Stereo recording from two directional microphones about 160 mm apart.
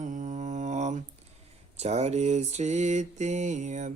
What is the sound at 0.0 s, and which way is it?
Mantra, 50° right (ahead or behind).